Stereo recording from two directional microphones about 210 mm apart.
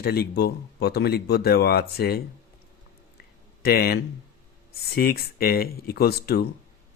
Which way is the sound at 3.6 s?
45° left (ahead or behind).